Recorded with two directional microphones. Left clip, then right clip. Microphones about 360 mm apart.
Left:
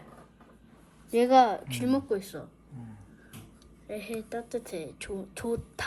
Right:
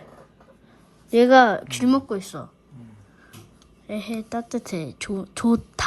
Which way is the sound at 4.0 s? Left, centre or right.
Centre.